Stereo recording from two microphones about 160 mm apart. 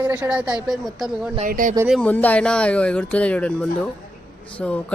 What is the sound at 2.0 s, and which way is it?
Speech, 10° left (ahead or behind).